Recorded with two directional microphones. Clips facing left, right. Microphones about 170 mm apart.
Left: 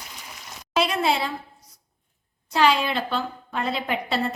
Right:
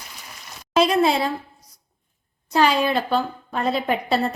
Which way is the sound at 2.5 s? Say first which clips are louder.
Right 2 dB; 45° right (ahead or behind).